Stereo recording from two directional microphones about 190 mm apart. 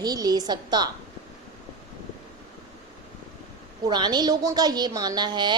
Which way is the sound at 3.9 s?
20° right (ahead or behind).